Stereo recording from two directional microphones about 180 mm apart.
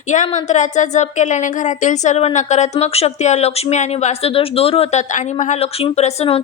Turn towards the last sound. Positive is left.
turn(degrees=35)  # may be behind; listen again after turning